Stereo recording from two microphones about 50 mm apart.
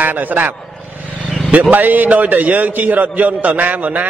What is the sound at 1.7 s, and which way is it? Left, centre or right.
A man's voice, right.